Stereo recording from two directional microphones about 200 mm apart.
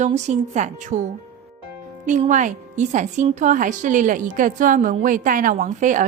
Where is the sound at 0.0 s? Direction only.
35° right (ahead or behind).